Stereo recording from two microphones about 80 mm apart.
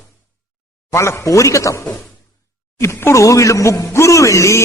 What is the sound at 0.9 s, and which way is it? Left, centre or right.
Speech, left.